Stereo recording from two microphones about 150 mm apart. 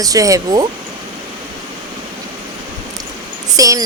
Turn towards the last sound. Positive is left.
turn(degrees=-25)  # may be behind; listen again after turning